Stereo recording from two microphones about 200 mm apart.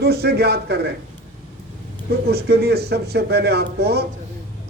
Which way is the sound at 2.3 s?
55° right (ahead or behind).